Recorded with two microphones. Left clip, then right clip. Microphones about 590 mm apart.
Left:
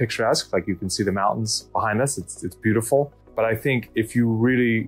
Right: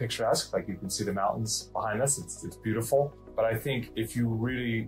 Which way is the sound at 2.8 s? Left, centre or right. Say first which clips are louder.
Left 5 dB; left.